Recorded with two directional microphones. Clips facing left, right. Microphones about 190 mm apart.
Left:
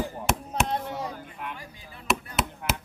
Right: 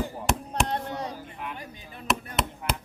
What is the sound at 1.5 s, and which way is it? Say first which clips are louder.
Speech: right 3 dB; 20° right (ahead or behind).